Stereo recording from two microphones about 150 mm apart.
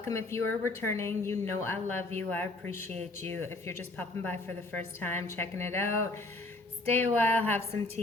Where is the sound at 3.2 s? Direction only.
15° left (ahead or behind).